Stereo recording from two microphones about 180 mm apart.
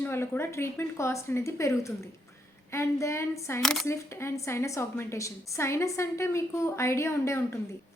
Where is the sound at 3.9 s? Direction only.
15° left (ahead or behind).